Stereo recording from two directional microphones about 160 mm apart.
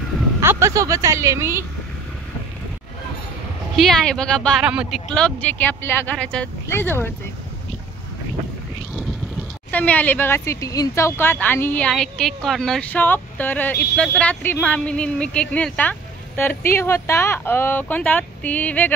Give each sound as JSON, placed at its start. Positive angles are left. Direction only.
{"t": 0.4, "sound": "speech", "side_deg": -15}
{"t": 3.7, "sound": "speech", "side_deg": 0}
{"t": 4.6, "sound": "speech", "side_deg": -5}
{"t": 5.1, "sound": "speech", "side_deg": 5}
{"t": 9.7, "sound": "speech", "side_deg": 10}